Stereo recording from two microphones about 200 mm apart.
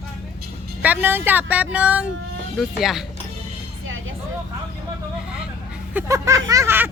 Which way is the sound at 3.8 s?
75° right (ahead or behind).